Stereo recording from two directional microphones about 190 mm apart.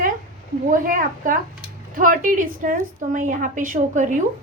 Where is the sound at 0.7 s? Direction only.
45° right (ahead or behind).